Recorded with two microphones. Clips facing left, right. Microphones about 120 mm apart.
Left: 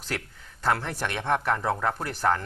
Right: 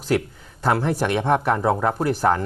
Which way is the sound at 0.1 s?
10° right (ahead or behind).